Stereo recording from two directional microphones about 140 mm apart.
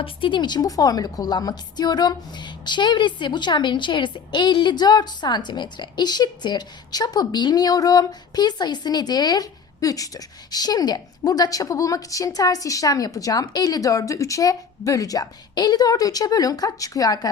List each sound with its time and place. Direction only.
0.0 s a woman's voice: 35° left (ahead or behind)